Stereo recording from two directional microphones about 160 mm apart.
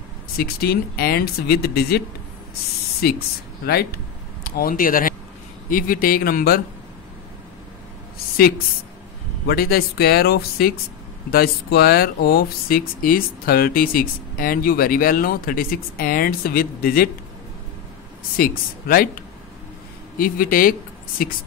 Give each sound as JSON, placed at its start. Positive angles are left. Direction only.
{"t": 0.4, "sound": "speech", "side_deg": 70}
{"t": 4.5, "sound": "speech", "side_deg": 60}
{"t": 9.5, "sound": "speech", "side_deg": 75}
{"t": 18.4, "sound": "speech", "side_deg": 65}